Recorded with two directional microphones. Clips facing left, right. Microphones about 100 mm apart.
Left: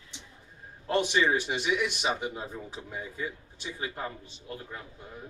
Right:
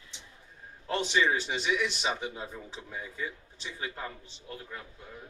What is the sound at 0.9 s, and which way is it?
A man's voice, 15° left (ahead or behind).